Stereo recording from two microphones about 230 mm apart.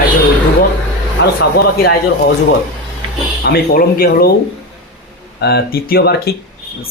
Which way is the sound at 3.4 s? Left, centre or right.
Left.